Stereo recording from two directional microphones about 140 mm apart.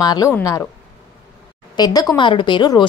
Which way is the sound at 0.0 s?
30° left (ahead or behind).